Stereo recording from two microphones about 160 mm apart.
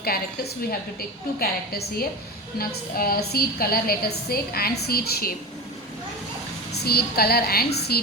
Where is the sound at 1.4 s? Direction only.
75° left (ahead or behind).